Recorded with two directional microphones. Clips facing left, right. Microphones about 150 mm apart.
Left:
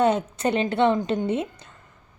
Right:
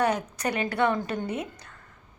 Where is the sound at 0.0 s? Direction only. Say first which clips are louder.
Left 5 dB; 25° left (ahead or behind).